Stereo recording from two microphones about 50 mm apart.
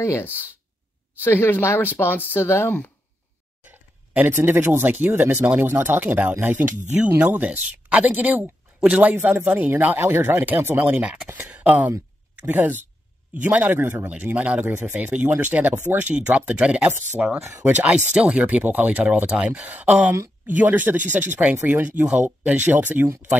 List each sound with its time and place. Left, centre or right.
1.2 s speech: left
2.4 s speech: left
3.6 s a sound: right
4.3 s a man's voice: right
7.4 s a man's voice: right
9.2 s a man's voice: right
9.9 s a man's voice: right
19.3 s speech: centre
19.7 s a man's voice: right